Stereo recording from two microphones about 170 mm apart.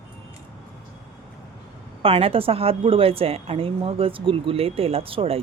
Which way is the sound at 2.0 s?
35° right (ahead or behind).